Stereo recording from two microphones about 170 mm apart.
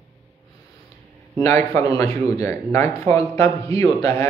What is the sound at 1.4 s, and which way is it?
A man's voice, 20° left (ahead or behind).